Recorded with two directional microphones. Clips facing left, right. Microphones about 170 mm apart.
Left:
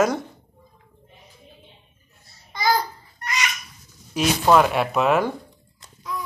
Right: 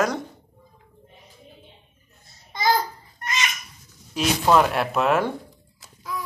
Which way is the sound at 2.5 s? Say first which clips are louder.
Even; 25° right (ahead or behind).